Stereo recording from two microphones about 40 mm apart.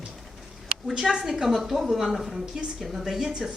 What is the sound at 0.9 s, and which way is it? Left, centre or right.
A woman's voice, centre.